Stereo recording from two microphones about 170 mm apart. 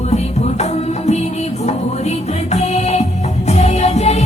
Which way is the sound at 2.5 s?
40° left (ahead or behind).